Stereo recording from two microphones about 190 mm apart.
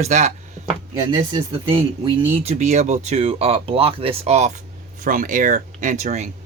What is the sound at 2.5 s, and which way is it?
Speech, 35° right (ahead or behind).